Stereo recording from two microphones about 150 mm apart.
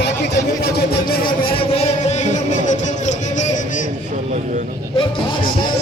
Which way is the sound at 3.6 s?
60° left (ahead or behind).